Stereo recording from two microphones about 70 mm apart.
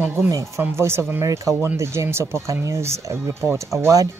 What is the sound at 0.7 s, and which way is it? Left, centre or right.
Speech, right.